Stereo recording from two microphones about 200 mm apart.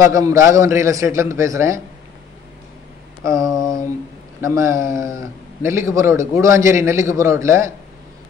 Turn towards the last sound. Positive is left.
turn(degrees=-15)  # may be behind; listen again after turning